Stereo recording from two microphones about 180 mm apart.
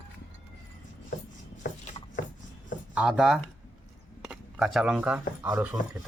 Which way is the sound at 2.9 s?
5° right (ahead or behind).